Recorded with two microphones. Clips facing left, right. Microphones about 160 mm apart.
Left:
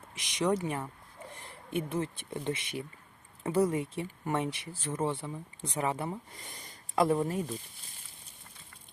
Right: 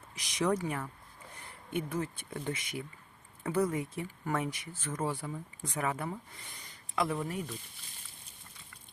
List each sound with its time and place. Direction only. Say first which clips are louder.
0.2 s speech: left 1 dB; 20° left (ahead or behind)
6.4 s speech: left 3 dB; 40° left (ahead or behind)